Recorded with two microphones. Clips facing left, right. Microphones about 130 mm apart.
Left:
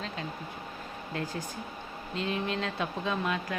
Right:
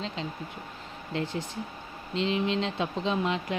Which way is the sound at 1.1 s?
25° right (ahead or behind).